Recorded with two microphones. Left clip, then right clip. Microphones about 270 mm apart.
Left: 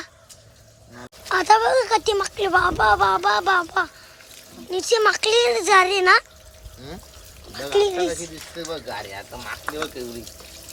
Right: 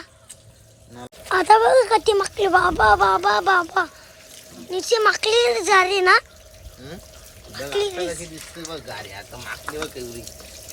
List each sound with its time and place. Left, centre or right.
1.0 s speech: centre
7.5 s speech: centre
9.6 s speech: left